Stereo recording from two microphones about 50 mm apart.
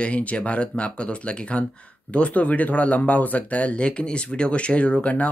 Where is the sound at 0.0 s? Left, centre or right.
Left.